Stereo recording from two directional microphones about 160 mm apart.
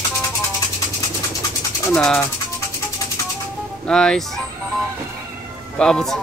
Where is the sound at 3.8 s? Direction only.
5° left (ahead or behind).